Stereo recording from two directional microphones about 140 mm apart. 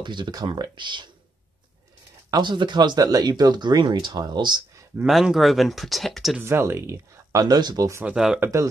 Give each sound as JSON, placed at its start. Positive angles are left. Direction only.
{"t": 0.0, "sound": "speech", "side_deg": -35}
{"t": 2.3, "sound": "speech", "side_deg": -35}
{"t": 5.0, "sound": "speech", "side_deg": 0}
{"t": 6.4, "sound": "speech", "side_deg": -20}
{"t": 8.0, "sound": "speech", "side_deg": -5}
{"t": 8.4, "sound": "speech", "side_deg": -20}